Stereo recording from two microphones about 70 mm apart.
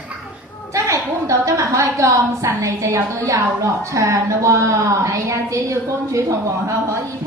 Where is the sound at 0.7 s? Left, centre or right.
Right.